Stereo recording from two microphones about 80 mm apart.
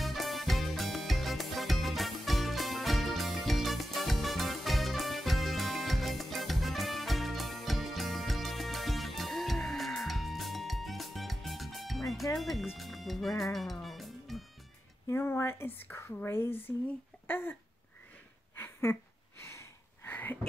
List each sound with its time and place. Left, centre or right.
0.0 s music: centre
12.4 s speech: centre
15.0 s speech: left
17.3 s babbling: left
18.6 s a sound: left